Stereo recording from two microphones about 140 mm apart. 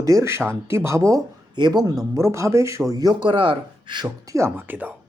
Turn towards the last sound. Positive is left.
turn(degrees=-15)  # may be behind; listen again after turning